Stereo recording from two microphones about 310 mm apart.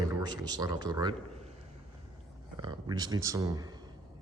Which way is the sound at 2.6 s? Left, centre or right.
Centre.